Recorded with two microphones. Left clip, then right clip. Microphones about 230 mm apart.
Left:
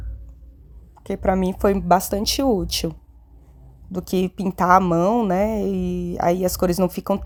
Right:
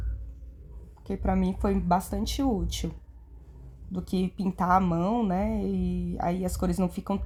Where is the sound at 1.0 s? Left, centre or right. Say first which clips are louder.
Left 9 dB; left.